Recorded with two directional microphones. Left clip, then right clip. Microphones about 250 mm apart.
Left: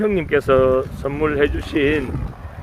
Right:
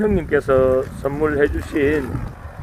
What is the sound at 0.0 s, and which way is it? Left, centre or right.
Speech, centre.